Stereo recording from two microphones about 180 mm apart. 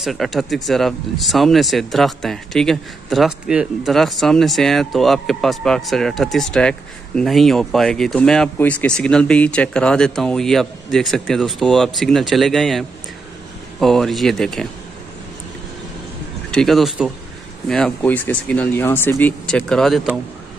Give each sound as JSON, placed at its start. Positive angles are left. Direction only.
{"t": 0.0, "sound": "speech", "side_deg": 0}
{"t": 16.4, "sound": "speech", "side_deg": 0}